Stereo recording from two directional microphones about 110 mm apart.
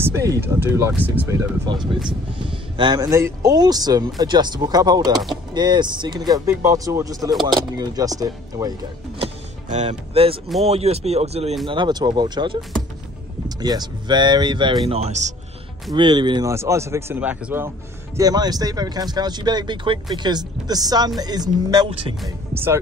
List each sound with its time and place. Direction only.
0.0 s speech: 30° right (ahead or behind)
1.7 s speech: 45° right (ahead or behind)
3.0 s speech: 30° right (ahead or behind)
9.2 s vehicle: 85° right; by 10.4 s 60° right (ahead or behind)
10.6 s speech: 70° right (ahead or behind)
11.6 s speech: 45° right (ahead or behind)
14.9 s a man's voice: 80° right
15.9 s speech: 45° right (ahead or behind)
16.4 s speech: 25° right (ahead or behind)
17.2 s speech: 15° right (ahead or behind)
18.1 s speech: 35° right (ahead or behind)
22.5 s speech: 20° right (ahead or behind)